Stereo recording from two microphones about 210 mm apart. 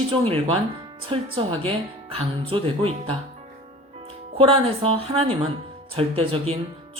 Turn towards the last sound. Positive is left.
turn(degrees=-25)  # may be behind; listen again after turning